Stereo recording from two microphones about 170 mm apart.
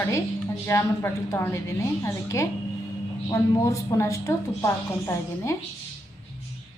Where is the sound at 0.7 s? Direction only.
15° left (ahead or behind).